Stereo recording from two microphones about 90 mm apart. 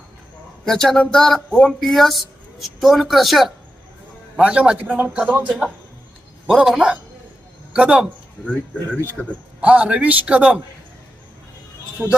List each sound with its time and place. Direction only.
0.6 s speech: 5° left (ahead or behind)
4.4 s a man's voice: 15° right (ahead or behind)
6.5 s a man's voice: 5° right (ahead or behind)
9.2 s a man's voice: 15° left (ahead or behind)
9.6 s a man's voice: 15° right (ahead or behind)
12.0 s speech: 30° right (ahead or behind)